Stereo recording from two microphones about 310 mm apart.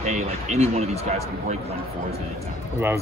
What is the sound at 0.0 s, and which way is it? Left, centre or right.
A man's voice, right.